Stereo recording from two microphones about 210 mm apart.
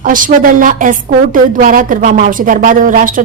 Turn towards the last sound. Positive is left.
turn(degrees=-40)  # may be behind; listen again after turning